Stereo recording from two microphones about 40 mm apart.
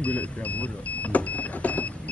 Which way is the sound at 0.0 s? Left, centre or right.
Left.